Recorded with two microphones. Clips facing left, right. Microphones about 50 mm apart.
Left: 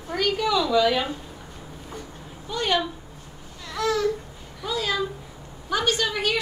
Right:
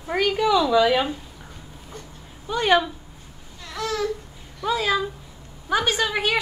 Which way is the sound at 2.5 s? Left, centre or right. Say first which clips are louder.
Right 5 dB; right.